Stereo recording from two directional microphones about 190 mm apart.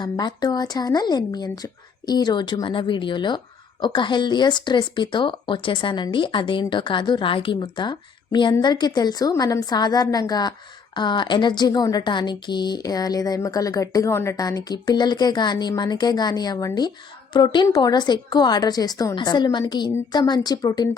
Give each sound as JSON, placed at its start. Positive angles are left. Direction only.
{"t": 0.0, "sound": "speech", "side_deg": 20}